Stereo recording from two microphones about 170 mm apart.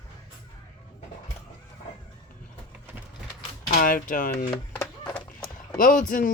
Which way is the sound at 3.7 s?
55° left (ahead or behind).